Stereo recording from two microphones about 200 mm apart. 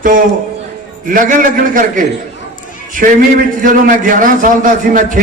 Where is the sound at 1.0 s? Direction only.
40° right (ahead or behind).